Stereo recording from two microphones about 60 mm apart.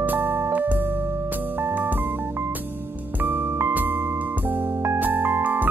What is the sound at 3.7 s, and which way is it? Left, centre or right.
Music, right.